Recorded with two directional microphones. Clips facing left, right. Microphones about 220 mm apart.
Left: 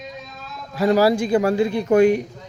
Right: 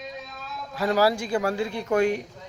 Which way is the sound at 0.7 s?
15° left (ahead or behind).